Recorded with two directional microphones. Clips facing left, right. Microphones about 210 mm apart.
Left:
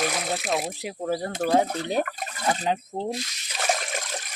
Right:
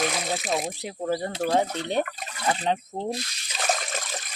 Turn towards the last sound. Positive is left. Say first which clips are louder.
# left 1 dB
turn(degrees=10)  # may be behind; listen again after turning